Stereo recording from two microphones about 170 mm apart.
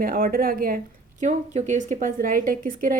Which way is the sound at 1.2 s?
45° right (ahead or behind).